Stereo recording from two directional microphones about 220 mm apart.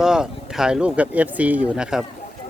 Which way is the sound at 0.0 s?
5° right (ahead or behind).